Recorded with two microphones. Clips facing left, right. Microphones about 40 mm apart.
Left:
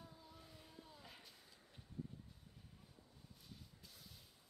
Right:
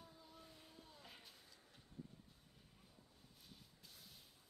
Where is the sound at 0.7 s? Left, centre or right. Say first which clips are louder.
Left 3 dB; centre.